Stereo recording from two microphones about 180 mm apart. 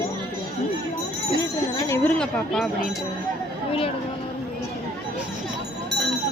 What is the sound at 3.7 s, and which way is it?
Speech, 30° left (ahead or behind).